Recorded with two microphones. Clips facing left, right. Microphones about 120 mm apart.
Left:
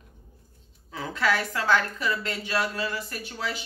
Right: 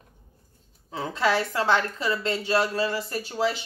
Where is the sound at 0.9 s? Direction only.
25° right (ahead or behind).